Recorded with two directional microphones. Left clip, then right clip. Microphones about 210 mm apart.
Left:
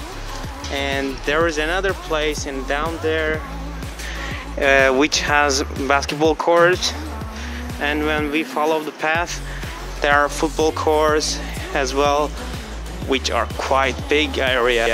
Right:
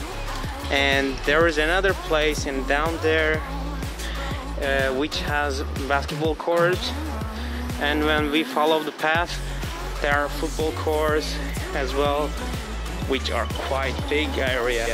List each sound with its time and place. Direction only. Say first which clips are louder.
0.7 s speech: right 2 dB; centre (ahead or behind)
4.6 s speech: left 9 dB; 30° left (ahead or behind)
7.8 s speech: left 1 dB; 5° left (ahead or behind)
10.0 s speech: left 7 dB; 20° left (ahead or behind)